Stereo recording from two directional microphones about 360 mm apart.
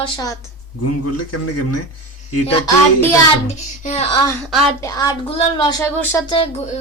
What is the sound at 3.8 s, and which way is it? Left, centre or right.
Speech, centre.